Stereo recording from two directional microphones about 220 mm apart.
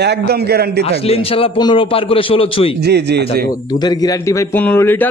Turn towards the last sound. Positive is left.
turn(degrees=10)  # may be behind; listen again after turning